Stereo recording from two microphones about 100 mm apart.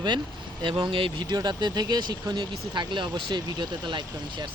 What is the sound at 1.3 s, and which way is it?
Speech, 45° right (ahead or behind).